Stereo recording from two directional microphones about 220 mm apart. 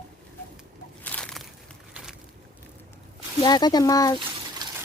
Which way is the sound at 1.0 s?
5° left (ahead or behind).